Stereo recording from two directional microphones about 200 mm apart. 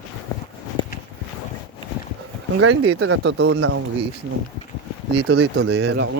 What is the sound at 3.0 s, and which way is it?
Speech, 75° right (ahead or behind).